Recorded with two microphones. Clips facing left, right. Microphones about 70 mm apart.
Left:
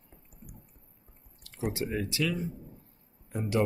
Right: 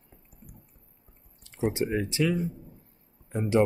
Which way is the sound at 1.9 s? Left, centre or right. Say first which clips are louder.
Right 4 dB; right.